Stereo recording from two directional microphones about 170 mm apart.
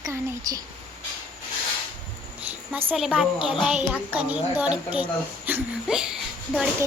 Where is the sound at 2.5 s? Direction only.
5° right (ahead or behind).